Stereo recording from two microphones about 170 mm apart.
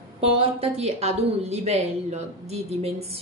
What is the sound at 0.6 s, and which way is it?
A woman's voice, 40° right (ahead or behind).